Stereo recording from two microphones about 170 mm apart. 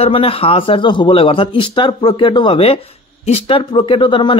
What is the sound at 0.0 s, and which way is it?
Speech, 35° left (ahead or behind).